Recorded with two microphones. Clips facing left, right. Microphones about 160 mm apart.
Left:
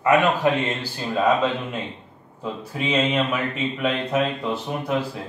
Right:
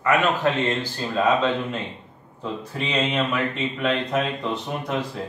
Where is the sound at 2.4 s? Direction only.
5° left (ahead or behind).